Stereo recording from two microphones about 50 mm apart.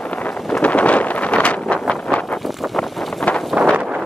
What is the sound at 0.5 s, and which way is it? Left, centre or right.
Wind noise, left.